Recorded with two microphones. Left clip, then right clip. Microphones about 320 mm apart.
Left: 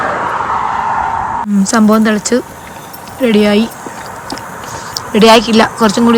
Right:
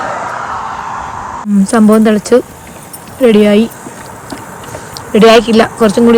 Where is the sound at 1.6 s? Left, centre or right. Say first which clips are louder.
Right 3 dB; centre.